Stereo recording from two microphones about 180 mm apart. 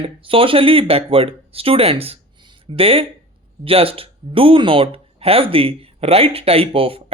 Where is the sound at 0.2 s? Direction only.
30° right (ahead or behind).